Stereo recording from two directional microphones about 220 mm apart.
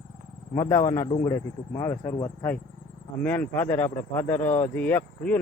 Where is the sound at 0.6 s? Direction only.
15° left (ahead or behind).